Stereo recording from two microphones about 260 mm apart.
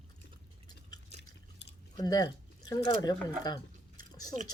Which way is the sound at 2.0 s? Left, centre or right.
Centre.